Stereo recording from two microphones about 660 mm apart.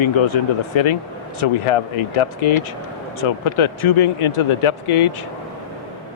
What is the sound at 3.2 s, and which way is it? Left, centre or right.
Speech, left.